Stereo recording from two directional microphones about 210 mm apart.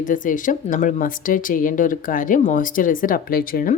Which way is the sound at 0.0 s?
40° left (ahead or behind).